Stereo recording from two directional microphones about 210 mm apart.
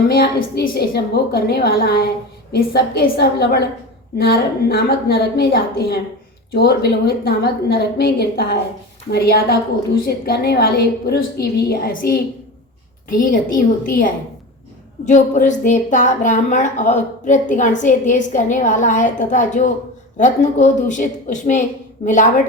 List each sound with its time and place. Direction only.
0.1 s a woman's voice: 45° left (ahead or behind)
15.0 s a woman's voice: 35° left (ahead or behind)